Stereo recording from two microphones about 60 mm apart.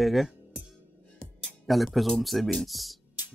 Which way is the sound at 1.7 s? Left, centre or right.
Centre.